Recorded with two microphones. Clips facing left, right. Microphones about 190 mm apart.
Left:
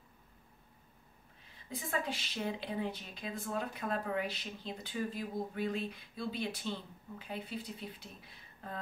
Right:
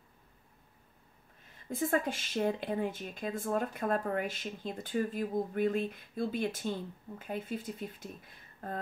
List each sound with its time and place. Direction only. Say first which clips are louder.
1.4 s speech: right 10 dB; 50° right (ahead or behind)